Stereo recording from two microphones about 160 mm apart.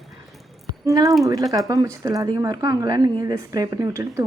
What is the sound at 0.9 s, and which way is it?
Speech, 20° right (ahead or behind).